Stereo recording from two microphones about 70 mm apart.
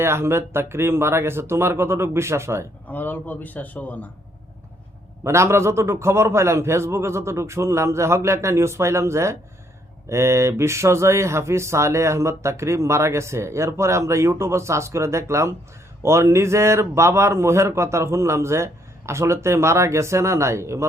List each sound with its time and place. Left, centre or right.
0.0 s a man's voice: right
2.8 s a man's voice: left
5.2 s a man's voice: right